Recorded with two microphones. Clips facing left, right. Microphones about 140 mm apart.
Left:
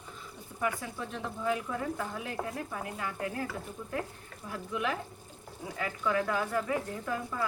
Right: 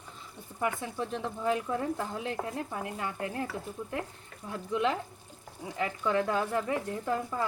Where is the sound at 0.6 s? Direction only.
25° right (ahead or behind).